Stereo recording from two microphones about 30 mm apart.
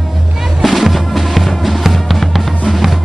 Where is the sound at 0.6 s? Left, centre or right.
Centre.